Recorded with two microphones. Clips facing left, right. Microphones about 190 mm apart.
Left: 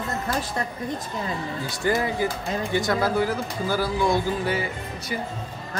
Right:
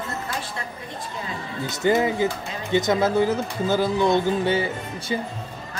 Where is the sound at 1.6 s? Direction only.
20° right (ahead or behind).